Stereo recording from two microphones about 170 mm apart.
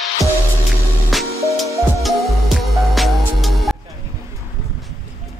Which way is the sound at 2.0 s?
Centre (ahead or behind).